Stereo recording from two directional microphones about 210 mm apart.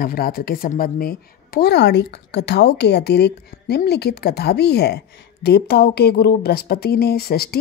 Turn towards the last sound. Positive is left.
turn(degrees=50)  # may be behind; listen again after turning